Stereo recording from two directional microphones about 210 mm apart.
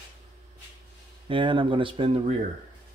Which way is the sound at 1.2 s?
25° right (ahead or behind).